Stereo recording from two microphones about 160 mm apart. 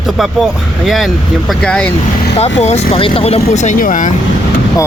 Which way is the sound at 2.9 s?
35° left (ahead or behind).